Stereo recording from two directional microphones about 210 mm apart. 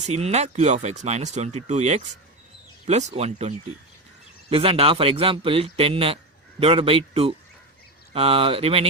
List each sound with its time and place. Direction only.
0.0 s speech: 30° right (ahead or behind)